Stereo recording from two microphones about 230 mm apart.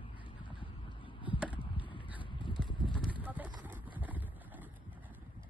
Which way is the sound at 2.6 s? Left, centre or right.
Centre.